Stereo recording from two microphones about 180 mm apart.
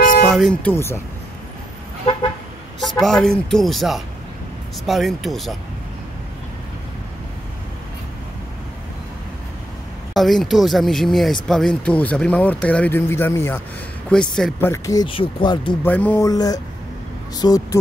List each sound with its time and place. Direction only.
0.3 s speech: 5° left (ahead or behind)
2.8 s a man's voice: centre (ahead or behind)
10.1 s a man's voice: centre (ahead or behind)
14.7 s speech: 20° left (ahead or behind)
15.8 s speech: 10° left (ahead or behind)